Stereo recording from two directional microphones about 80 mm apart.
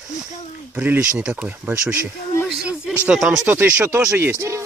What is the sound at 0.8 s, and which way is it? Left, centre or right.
Speech, centre.